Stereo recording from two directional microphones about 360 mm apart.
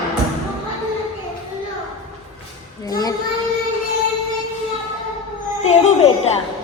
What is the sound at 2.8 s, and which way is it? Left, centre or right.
Speech, centre.